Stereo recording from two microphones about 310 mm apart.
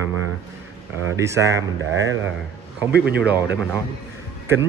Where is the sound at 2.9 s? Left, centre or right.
Right.